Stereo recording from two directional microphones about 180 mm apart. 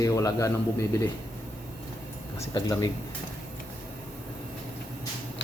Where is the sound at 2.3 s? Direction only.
20° left (ahead or behind).